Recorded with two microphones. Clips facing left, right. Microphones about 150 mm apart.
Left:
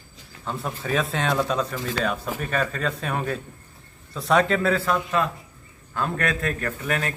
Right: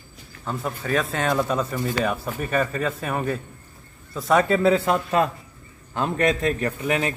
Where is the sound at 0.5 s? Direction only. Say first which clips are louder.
Right 1 dB; centre (ahead or behind).